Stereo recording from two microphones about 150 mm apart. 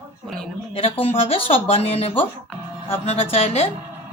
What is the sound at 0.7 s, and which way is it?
A woman's voice, 40° left (ahead or behind).